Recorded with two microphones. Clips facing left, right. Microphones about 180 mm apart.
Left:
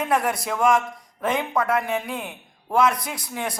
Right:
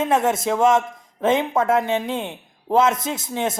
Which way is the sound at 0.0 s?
25° right (ahead or behind).